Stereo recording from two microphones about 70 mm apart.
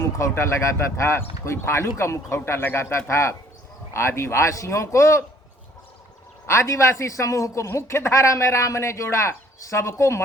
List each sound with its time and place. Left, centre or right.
0.2 s a man's voice: left
6.5 s a man's voice: left